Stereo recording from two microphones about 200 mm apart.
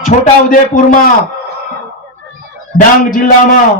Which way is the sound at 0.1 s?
35° left (ahead or behind).